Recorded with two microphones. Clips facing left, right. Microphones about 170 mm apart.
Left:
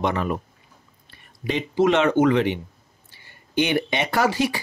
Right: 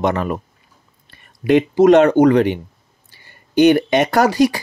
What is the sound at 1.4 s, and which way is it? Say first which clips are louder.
Speech: right 9 dB; 50° right (ahead or behind).